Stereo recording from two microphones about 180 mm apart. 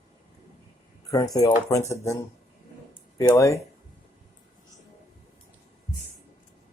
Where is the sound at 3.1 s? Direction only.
15° left (ahead or behind).